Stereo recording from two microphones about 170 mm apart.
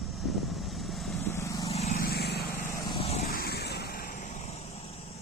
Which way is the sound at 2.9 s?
40° left (ahead or behind).